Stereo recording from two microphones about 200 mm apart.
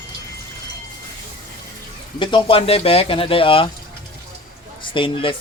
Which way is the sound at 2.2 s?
25° left (ahead or behind).